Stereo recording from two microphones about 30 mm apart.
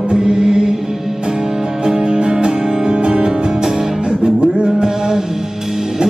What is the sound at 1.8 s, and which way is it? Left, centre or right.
Music, right.